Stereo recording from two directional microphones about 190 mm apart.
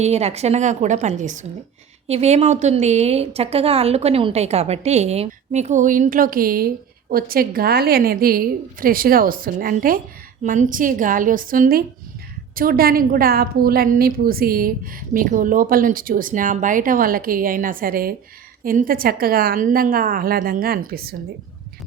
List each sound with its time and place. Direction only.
0.0 s a woman's voice: 35° right (ahead or behind); by 21.2 s 55° right (ahead or behind)